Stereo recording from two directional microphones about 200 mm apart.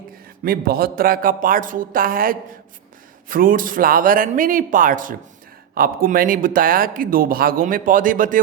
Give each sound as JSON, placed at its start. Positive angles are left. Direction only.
{"t": 0.4, "sound": "speech", "side_deg": -50}